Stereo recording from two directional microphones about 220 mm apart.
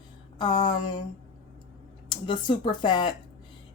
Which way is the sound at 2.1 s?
20° left (ahead or behind).